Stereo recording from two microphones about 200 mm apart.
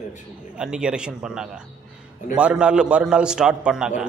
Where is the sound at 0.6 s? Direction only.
5° right (ahead or behind).